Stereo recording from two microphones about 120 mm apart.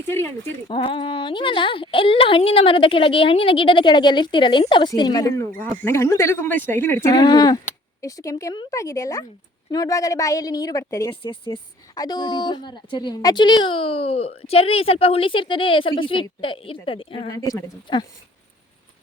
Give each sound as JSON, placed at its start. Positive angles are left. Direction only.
{"t": 0.1, "sound": "a woman's voice", "side_deg": 20}
{"t": 0.7, "sound": "a woman's voice", "side_deg": 45}
{"t": 7.1, "sound": "a woman's voice", "side_deg": 35}
{"t": 11.1, "sound": "a woman's voice", "side_deg": 45}
{"t": 17.3, "sound": "speech", "side_deg": 30}